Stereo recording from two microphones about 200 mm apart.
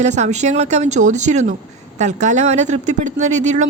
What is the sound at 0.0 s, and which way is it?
A woman's voice, 35° right (ahead or behind).